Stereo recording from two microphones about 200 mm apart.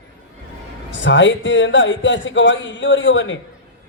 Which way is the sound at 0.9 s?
65° left (ahead or behind).